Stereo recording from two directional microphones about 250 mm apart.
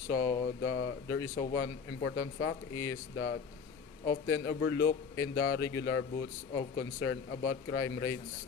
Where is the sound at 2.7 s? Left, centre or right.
Centre.